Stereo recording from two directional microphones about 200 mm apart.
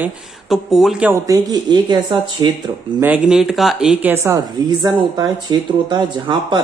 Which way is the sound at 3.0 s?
5° right (ahead or behind).